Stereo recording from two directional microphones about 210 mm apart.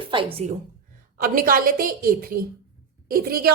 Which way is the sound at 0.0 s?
25° right (ahead or behind).